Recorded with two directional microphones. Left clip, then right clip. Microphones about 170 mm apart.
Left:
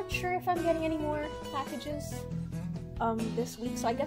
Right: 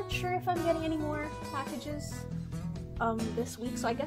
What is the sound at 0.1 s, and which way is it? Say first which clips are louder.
Speech: left 1 dB; 20° left (ahead or behind).